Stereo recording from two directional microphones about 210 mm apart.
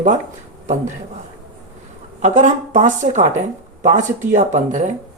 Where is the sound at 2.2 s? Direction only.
35° right (ahead or behind).